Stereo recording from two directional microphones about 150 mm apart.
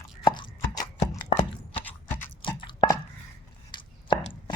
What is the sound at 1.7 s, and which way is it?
Clip-clop, 10° left (ahead or behind).